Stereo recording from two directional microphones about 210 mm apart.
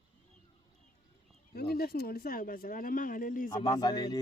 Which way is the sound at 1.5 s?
50° left (ahead or behind).